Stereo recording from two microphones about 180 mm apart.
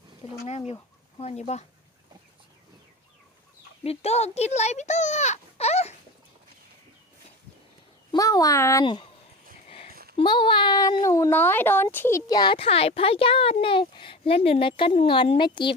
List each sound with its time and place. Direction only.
0.4 s speech: 35° left (ahead or behind)
3.8 s speech: 35° left (ahead or behind)
8.1 s a child's voice: 20° left (ahead or behind)
9.6 s a sound: 35° left (ahead or behind)
9.9 s a sound: 60° right (ahead or behind)
10.2 s a child's voice: 25° left (ahead or behind)